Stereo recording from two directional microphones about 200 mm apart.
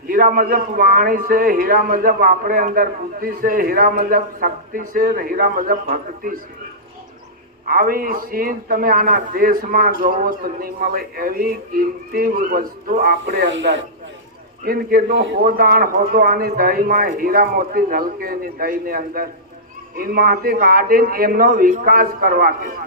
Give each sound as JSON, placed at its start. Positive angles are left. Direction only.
{"t": 0.1, "sound": "a man's voice", "side_deg": -45}
{"t": 7.7, "sound": "a man's voice", "side_deg": -45}
{"t": 14.6, "sound": "a man's voice", "side_deg": -50}
{"t": 15.4, "sound": "a man's voice", "side_deg": -45}